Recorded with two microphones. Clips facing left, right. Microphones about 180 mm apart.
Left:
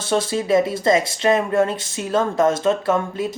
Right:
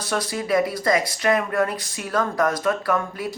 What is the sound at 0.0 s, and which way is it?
Speech, 25° left (ahead or behind).